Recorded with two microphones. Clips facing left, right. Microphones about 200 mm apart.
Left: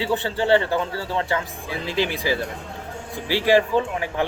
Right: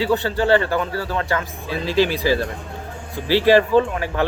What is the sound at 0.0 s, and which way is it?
A man's voice, 20° left (ahead or behind).